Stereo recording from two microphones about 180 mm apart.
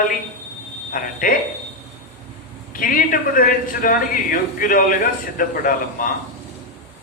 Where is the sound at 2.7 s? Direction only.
50° left (ahead or behind).